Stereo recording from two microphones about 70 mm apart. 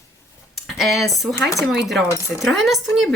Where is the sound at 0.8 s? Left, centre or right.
Centre.